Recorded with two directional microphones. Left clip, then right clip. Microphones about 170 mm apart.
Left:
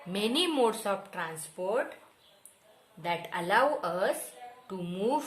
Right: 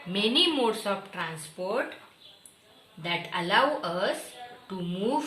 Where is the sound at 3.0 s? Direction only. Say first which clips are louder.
Right 2 dB; 65° left (ahead or behind).